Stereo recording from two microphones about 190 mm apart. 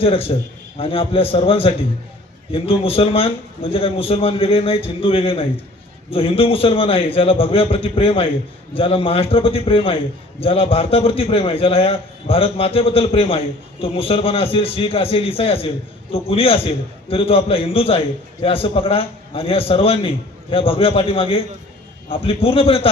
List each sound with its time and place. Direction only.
0.0 s a man's voice: 30° left (ahead or behind)